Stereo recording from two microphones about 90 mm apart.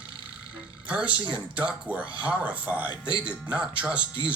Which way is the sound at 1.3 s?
15° right (ahead or behind).